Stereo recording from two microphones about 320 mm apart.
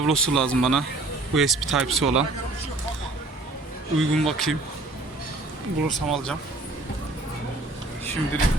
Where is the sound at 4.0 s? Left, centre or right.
Centre.